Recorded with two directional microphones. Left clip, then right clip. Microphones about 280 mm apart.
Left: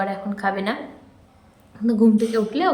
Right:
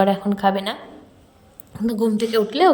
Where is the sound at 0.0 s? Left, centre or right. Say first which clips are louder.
Right 6 dB; right.